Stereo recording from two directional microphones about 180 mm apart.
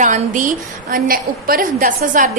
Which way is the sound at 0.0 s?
45° right (ahead or behind).